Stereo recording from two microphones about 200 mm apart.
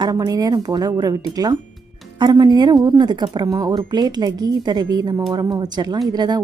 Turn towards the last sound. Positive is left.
turn(degrees=-20)  # may be behind; listen again after turning